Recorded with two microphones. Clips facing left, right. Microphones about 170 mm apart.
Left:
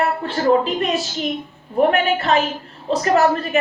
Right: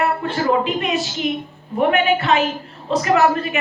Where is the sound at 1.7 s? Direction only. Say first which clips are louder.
Even; 40° left (ahead or behind).